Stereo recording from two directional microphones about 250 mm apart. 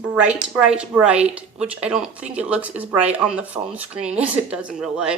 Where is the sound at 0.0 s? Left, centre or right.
Centre.